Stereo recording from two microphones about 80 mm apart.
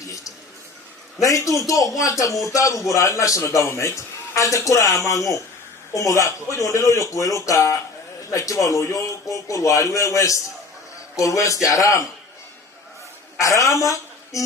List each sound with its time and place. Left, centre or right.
0.0 s a sound: left
1.2 s a man's voice: left
13.4 s a woman's voice: left